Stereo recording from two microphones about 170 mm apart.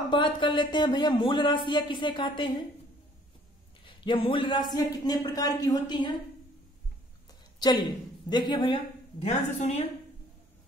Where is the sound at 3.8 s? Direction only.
30° left (ahead or behind).